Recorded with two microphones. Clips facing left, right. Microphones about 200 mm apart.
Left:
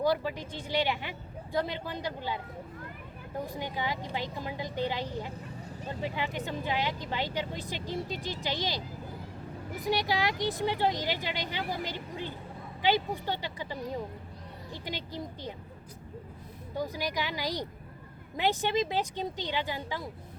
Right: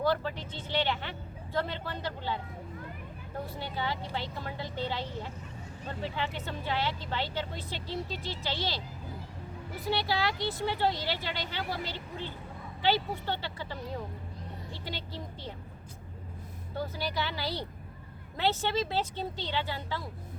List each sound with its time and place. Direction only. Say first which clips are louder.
0.0 s speech: left 1 dB; 10° left (ahead or behind)
3.4 s speech: left 1 dB; 15° left (ahead or behind)
9.8 s speech: left 1 dB; 15° left (ahead or behind)
16.7 s speech: left 1 dB; 15° left (ahead or behind)